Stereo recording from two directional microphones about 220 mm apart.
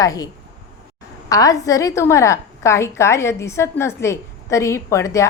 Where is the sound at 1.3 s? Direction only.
15° left (ahead or behind).